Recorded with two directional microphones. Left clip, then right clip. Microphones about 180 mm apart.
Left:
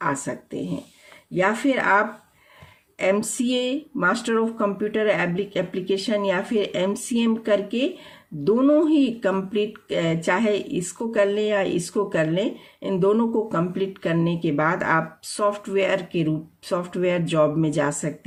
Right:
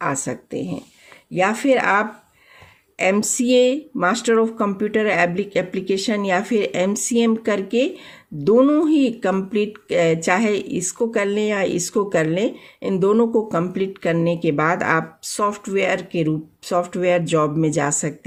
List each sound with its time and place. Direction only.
0.0 s speech: 40° right (ahead or behind)